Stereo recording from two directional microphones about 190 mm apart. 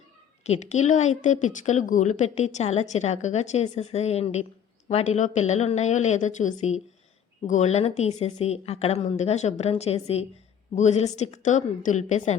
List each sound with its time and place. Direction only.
0.4 s a woman's voice: 35° left (ahead or behind)